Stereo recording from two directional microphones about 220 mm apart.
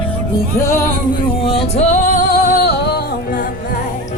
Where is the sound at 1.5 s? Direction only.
25° left (ahead or behind).